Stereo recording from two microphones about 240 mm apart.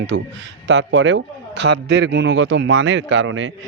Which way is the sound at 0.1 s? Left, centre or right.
Right.